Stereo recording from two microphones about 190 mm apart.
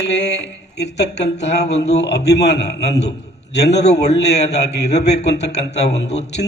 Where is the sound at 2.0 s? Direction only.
60° left (ahead or behind).